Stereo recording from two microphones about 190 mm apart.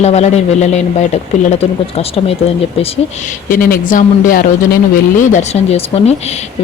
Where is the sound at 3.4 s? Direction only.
45° left (ahead or behind).